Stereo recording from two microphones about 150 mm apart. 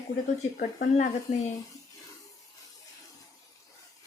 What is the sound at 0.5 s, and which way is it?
Speech, 75° left (ahead or behind).